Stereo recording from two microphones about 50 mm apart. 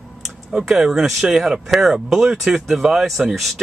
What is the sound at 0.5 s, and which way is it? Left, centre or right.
Speech, centre.